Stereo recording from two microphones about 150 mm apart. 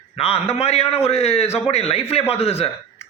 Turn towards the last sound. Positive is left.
turn(degrees=45)  # may be behind; listen again after turning